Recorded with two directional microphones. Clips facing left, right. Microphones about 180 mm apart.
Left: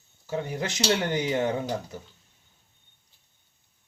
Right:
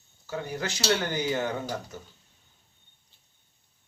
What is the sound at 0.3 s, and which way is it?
Speech, 20° left (ahead or behind).